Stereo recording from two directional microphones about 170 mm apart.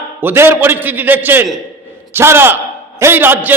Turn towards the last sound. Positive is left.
turn(degrees=-10)  # may be behind; listen again after turning